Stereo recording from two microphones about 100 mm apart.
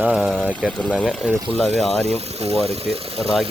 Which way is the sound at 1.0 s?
Centre (ahead or behind).